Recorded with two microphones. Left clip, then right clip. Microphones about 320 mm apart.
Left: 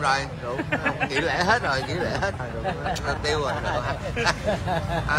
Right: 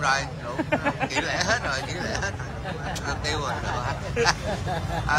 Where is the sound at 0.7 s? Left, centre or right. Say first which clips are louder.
Even; right.